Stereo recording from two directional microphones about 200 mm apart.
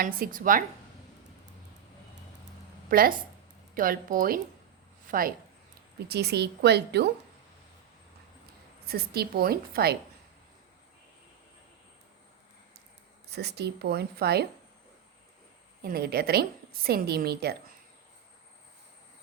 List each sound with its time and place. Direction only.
0.0 s a woman's voice: 45° right (ahead or behind)
2.9 s a woman's voice: 45° right (ahead or behind)
8.9 s a woman's voice: 50° right (ahead or behind)
13.3 s a woman's voice: 55° right (ahead or behind)
15.8 s a woman's voice: 50° right (ahead or behind)